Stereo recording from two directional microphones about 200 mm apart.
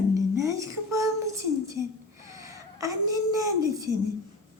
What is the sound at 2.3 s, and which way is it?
A child's voice, 15° right (ahead or behind).